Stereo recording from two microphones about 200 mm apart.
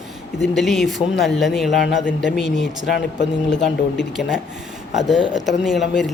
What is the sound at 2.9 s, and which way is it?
Speech, 60° left (ahead or behind).